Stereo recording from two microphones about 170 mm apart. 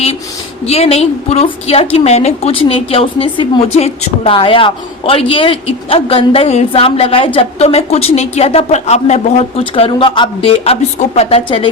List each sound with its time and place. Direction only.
0.6 s a woman's voice: 35° left (ahead or behind)